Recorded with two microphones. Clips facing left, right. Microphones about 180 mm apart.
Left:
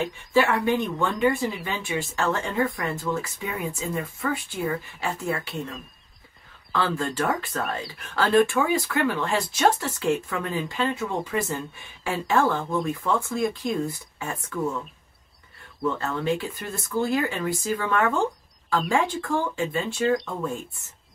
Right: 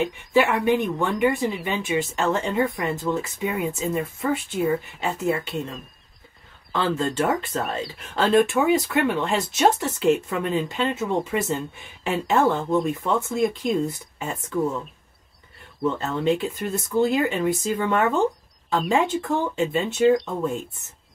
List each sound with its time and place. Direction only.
0.0 s speech: 20° right (ahead or behind)
5.5 s speech: centre (ahead or behind)
6.7 s speech: 20° right (ahead or behind)
15.8 s speech: 20° right (ahead or behind)